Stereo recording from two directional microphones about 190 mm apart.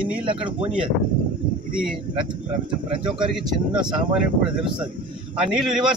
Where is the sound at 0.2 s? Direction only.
25° right (ahead or behind).